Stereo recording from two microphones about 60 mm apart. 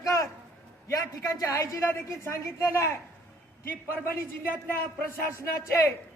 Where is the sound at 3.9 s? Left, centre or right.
Left.